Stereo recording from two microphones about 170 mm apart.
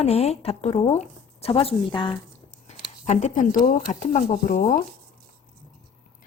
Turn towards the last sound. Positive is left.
turn(degrees=50)  # may be behind; listen again after turning